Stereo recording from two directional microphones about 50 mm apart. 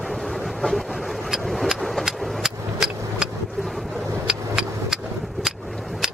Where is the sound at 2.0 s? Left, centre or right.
Centre.